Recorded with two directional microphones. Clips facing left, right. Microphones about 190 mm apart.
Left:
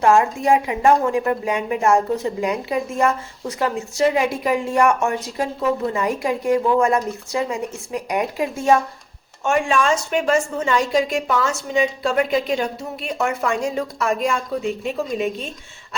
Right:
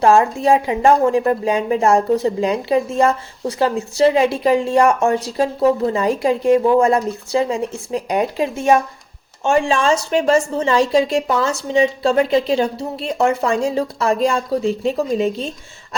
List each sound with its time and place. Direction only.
0.0 s a woman's voice: 30° right (ahead or behind)